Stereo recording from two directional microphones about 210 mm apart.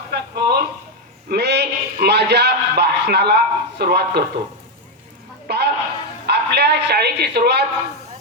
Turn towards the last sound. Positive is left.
turn(degrees=-50)  # may be behind; listen again after turning